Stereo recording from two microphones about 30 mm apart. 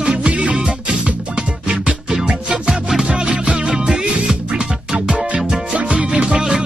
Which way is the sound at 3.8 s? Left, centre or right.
Right.